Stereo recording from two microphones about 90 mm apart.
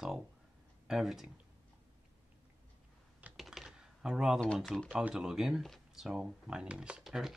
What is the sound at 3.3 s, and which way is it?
Typing, centre (ahead or behind).